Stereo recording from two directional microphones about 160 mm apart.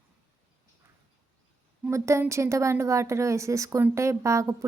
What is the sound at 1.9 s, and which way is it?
A woman's voice, 15° right (ahead or behind).